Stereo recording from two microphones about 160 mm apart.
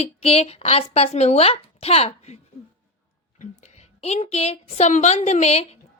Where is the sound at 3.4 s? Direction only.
45° left (ahead or behind).